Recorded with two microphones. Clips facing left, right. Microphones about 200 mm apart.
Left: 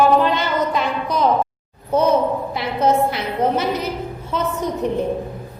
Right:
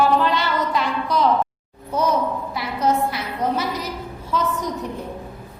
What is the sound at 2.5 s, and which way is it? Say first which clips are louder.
A woman's voice: left 3 dB; 25° left (ahead or behind).